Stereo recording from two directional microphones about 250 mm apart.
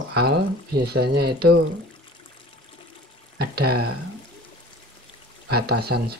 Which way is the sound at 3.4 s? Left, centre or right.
Right.